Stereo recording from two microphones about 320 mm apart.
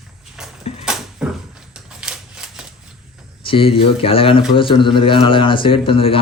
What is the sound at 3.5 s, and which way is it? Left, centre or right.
Speech, centre.